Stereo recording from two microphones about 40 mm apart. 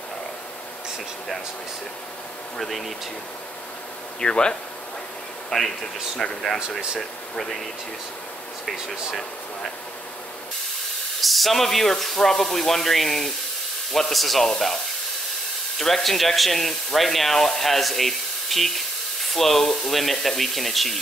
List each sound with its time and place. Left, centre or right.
4.2 s speech: left
5.5 s speech: centre
11.1 s speech: centre
15.8 s speech: centre